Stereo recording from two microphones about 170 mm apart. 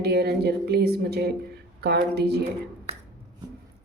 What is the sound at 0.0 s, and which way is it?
Speech, 70° right (ahead or behind).